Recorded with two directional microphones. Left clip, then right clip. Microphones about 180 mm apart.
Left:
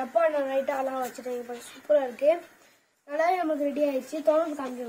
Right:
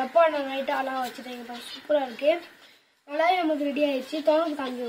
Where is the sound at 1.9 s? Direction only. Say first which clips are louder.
Left 1 dB; 15° left (ahead or behind).